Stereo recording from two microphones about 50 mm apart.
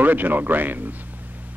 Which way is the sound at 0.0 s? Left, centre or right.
Right.